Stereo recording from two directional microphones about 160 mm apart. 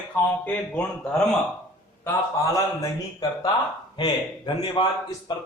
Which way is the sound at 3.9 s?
30° left (ahead or behind).